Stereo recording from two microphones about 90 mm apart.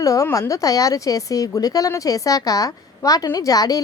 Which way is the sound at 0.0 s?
40° left (ahead or behind).